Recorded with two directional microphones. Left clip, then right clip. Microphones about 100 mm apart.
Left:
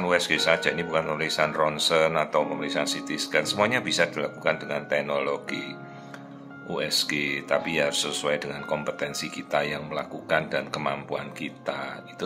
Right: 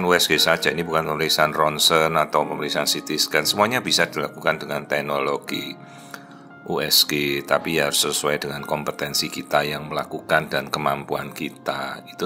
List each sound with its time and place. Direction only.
0.0 s speech: 40° right (ahead or behind)
6.7 s speech: 45° right (ahead or behind)